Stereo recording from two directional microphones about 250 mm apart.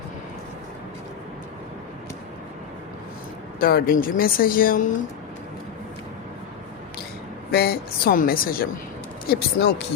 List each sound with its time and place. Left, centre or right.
3.6 s speech: left
7.5 s speech: left